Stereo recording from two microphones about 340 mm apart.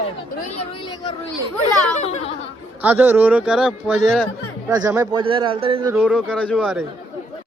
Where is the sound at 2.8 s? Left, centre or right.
Centre.